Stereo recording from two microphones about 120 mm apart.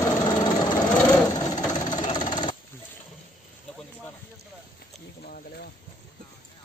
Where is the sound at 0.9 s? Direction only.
10° left (ahead or behind).